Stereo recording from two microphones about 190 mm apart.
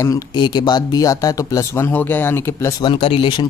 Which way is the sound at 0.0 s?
20° left (ahead or behind).